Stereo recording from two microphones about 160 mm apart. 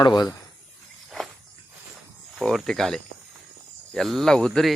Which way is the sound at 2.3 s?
Centre (ahead or behind).